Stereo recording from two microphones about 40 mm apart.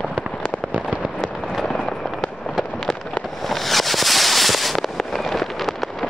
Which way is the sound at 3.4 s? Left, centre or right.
Centre.